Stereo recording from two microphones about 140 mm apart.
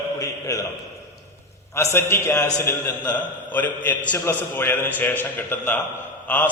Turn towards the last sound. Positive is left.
turn(degrees=10)  # may be behind; listen again after turning